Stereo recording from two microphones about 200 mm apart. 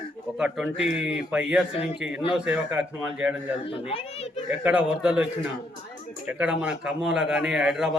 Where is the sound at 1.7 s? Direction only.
30° left (ahead or behind).